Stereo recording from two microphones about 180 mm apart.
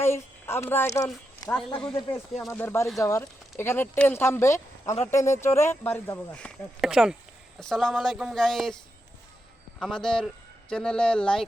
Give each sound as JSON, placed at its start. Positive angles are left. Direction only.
{"t": 0.0, "sound": "a sound", "side_deg": 15}
{"t": 0.9, "sound": "speech", "side_deg": 15}
{"t": 9.8, "sound": "speech", "side_deg": 5}